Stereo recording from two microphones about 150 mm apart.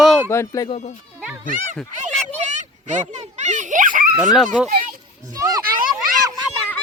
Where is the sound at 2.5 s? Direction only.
50° right (ahead or behind).